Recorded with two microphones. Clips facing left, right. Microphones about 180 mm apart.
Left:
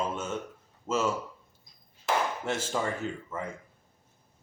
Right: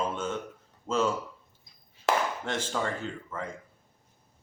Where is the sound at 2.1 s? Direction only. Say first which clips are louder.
Right 2 dB; 70° right (ahead or behind).